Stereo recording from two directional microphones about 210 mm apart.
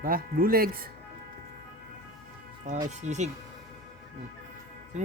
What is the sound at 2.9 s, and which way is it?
Speech, 35° right (ahead or behind).